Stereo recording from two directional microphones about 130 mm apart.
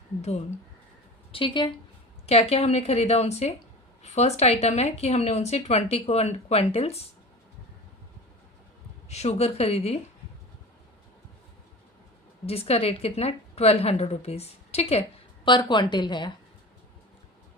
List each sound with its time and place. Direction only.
0.2 s speech: 55° left (ahead or behind)
1.3 s a woman's voice: 40° left (ahead or behind)
2.2 s speech: 50° left (ahead or behind)
9.0 s a woman's voice: 55° left (ahead or behind)
12.5 s a woman's voice: 50° left (ahead or behind)
15.4 s a woman's voice: 35° left (ahead or behind)